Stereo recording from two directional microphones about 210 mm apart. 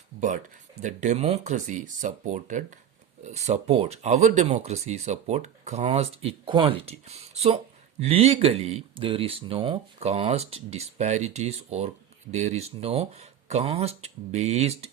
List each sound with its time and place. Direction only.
0.8 s speech: 35° right (ahead or behind)